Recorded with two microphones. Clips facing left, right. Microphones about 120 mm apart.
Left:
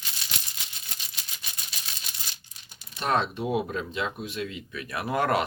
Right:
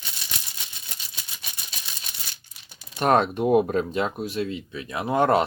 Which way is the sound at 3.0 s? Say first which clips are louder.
Right 6 dB; 50° right (ahead or behind).